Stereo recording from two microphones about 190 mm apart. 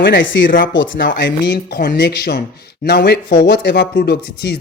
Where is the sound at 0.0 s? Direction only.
70° left (ahead or behind).